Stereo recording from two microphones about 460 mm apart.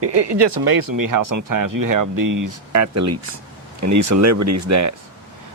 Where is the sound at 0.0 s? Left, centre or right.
Right.